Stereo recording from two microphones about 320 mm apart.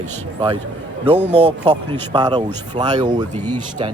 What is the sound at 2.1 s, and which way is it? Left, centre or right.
Speech, centre.